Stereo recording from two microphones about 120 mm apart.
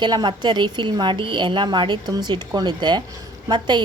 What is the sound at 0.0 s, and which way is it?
A woman's voice, 40° right (ahead or behind).